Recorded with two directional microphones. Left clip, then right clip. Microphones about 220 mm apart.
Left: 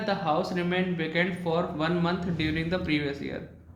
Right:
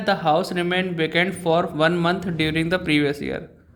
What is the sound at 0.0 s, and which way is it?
Speech, 55° right (ahead or behind).